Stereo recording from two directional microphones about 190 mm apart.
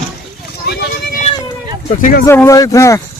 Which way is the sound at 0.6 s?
55° left (ahead or behind).